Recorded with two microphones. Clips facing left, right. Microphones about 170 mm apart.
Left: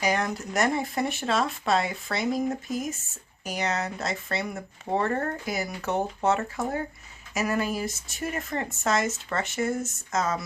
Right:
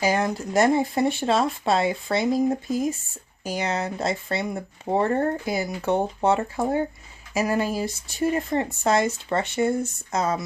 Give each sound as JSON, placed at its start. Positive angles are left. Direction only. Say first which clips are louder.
{"t": 0.0, "sound": "speech", "louder": "right 4 dB", "side_deg": -30}